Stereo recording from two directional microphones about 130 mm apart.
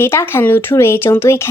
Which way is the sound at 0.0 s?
20° left (ahead or behind).